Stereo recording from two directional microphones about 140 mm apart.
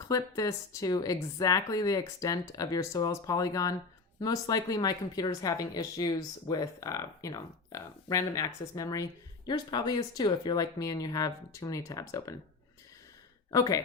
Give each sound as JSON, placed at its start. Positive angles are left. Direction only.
{"t": 0.1, "sound": "speech", "side_deg": 25}
{"t": 13.5, "sound": "speech", "side_deg": 25}